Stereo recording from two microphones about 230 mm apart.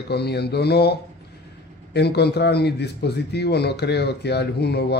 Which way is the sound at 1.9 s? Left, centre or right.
Left.